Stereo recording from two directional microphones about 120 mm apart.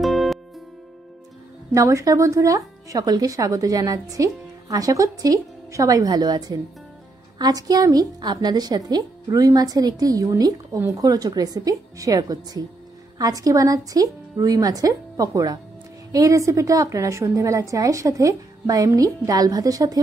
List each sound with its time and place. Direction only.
0.0 s music: centre (ahead or behind)
1.7 s a woman's voice: 25° right (ahead or behind)